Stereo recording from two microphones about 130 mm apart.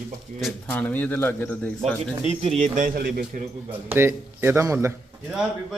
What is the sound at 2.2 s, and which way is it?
Speech, 60° right (ahead or behind).